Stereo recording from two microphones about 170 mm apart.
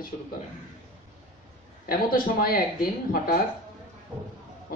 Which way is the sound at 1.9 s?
55° left (ahead or behind).